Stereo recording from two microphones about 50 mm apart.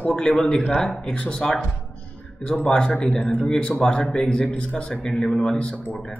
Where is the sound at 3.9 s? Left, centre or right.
Centre.